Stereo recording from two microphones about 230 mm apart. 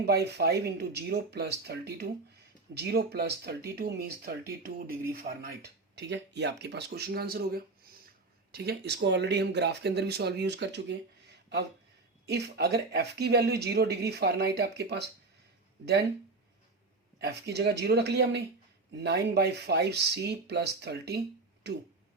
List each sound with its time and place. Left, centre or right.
0.0 s speech: right
12.2 s speech: right
17.2 s speech: right